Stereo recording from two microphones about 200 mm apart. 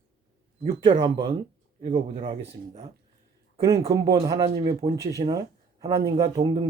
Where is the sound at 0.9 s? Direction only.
25° right (ahead or behind).